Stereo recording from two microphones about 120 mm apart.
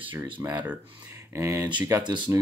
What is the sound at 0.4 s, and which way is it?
Speech, 15° right (ahead or behind).